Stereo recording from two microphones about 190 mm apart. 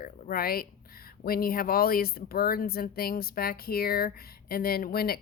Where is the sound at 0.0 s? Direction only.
50° left (ahead or behind).